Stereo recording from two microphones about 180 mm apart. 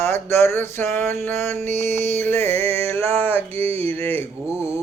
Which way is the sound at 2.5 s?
35° right (ahead or behind).